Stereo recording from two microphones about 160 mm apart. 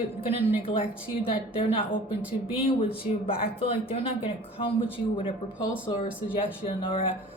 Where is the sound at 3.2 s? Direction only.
35° left (ahead or behind).